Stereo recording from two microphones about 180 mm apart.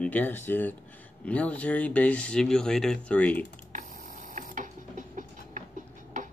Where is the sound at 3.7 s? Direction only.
45° right (ahead or behind).